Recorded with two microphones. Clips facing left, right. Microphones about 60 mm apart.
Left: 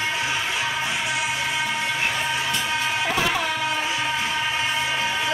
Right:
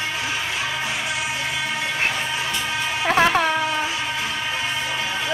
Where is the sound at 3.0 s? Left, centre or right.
Right.